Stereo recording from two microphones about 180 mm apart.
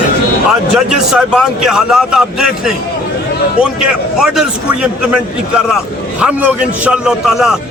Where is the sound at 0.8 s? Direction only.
5° right (ahead or behind).